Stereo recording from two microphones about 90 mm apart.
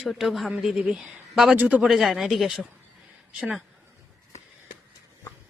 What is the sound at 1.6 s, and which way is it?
Speech, 15° right (ahead or behind).